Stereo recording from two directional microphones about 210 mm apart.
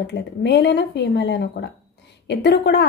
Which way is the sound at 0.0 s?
55° left (ahead or behind).